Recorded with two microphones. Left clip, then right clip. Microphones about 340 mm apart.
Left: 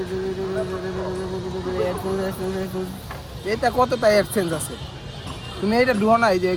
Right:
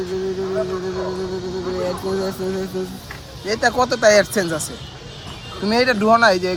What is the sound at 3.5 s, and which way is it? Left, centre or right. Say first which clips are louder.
Speech: right 2 dB; right.